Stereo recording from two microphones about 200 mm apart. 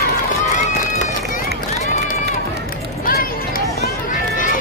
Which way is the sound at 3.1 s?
50° left (ahead or behind).